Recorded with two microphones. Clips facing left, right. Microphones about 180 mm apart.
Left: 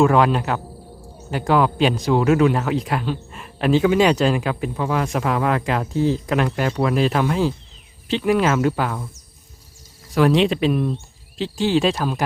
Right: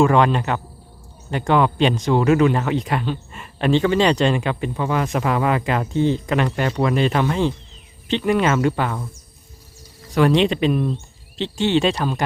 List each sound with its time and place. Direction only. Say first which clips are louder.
0.0 s speech: even; 5° left (ahead or behind)
10.2 s speech: even; centre (ahead or behind)